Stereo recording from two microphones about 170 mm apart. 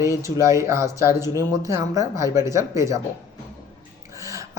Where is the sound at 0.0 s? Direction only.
20° right (ahead or behind).